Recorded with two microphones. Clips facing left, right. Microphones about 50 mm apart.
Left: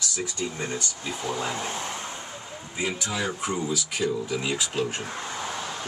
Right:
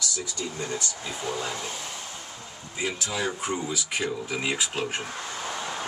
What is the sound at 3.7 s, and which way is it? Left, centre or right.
Speech, right.